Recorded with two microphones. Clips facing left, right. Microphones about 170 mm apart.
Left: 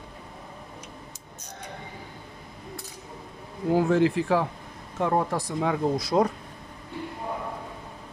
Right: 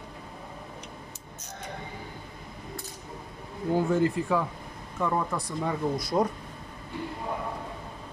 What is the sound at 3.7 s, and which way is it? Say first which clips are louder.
Speech: left 3 dB; 90° left.